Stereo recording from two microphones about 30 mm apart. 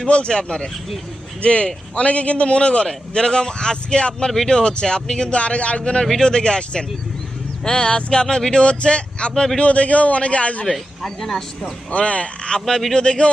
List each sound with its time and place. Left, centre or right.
0.3 s a man's voice: left
2.8 s speech: left
5.3 s a man's voice: left
9.6 s a man's voice: left
10.7 s speech: centre
11.9 s a man's voice: left
12.5 s a man's voice: left